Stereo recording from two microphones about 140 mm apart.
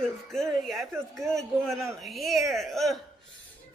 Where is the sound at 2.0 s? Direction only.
Centre (ahead or behind).